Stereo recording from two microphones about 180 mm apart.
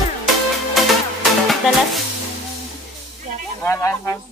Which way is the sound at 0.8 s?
Centre (ahead or behind).